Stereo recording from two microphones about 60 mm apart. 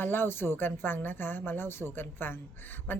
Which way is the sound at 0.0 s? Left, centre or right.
Left.